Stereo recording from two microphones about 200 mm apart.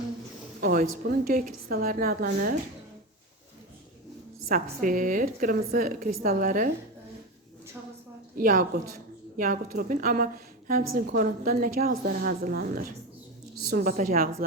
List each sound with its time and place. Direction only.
0.6 s a woman's voice: 45° right (ahead or behind)
4.4 s a woman's voice: 45° right (ahead or behind)
8.4 s a woman's voice: 45° right (ahead or behind)